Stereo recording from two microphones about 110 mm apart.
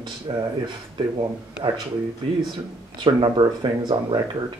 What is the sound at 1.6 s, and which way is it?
Speech, 55° right (ahead or behind).